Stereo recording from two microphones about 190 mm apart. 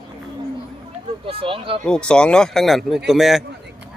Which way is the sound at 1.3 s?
30° right (ahead or behind).